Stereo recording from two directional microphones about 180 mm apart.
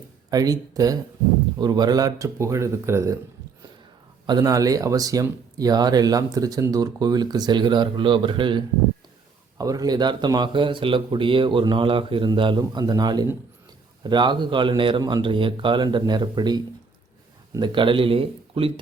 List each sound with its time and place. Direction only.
0.3 s speech: 20° right (ahead or behind)
4.3 s speech: 20° right (ahead or behind)